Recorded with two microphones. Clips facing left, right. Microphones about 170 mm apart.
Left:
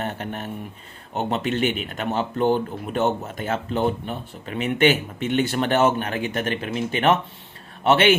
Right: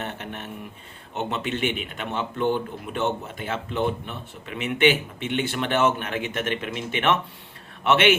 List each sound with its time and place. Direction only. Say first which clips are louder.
0.0 s speech: left 4 dB; 40° left (ahead or behind)